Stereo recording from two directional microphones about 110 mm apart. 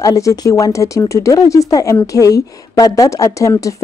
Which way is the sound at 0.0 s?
30° left (ahead or behind).